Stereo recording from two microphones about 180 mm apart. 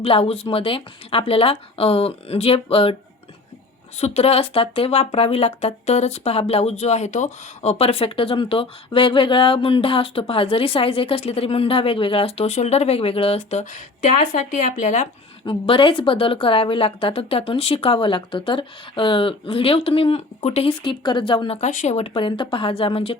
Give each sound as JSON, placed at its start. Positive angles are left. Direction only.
{"t": 0.0, "sound": "speech", "side_deg": 30}
{"t": 3.9, "sound": "speech", "side_deg": 35}
{"t": 15.4, "sound": "speech", "side_deg": 30}